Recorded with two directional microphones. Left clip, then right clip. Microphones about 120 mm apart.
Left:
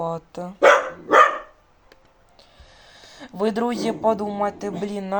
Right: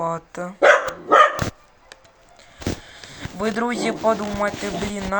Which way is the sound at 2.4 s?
Centre (ahead or behind).